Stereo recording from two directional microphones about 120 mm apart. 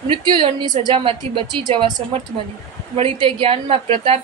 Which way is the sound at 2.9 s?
55° right (ahead or behind).